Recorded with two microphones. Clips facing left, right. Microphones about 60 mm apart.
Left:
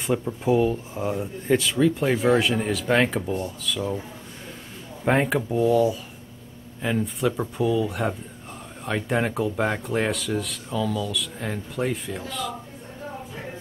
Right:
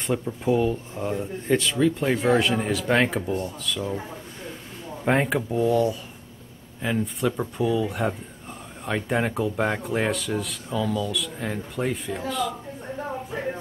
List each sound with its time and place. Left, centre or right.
0.0 s speech: centre
5.0 s speech: centre